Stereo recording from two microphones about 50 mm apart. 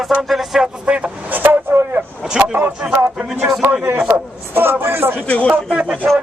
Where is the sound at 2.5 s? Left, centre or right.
Right.